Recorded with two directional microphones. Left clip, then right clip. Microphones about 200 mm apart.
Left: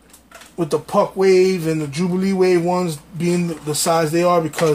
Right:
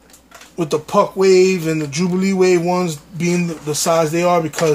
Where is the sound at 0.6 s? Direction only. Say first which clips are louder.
Right 2 dB; 10° right (ahead or behind).